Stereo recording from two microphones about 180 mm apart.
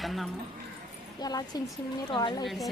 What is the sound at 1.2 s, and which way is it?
A woman's voice, 20° left (ahead or behind).